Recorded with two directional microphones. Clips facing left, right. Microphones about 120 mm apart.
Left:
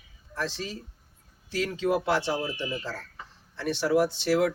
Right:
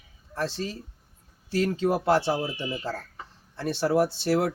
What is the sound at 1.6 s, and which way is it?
Speech, 30° right (ahead or behind).